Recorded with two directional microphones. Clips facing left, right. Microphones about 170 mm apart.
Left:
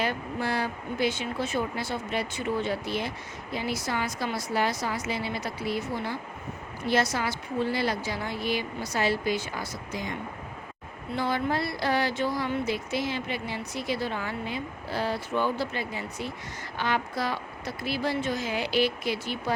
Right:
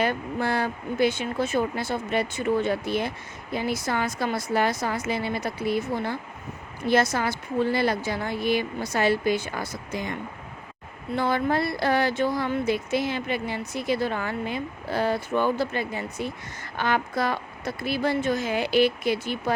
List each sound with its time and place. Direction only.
0.0 s speech: 55° right (ahead or behind)
11.2 s speech: 55° right (ahead or behind)